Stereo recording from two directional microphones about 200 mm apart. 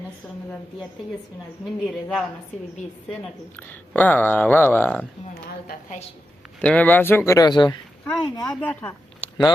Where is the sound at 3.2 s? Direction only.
10° left (ahead or behind).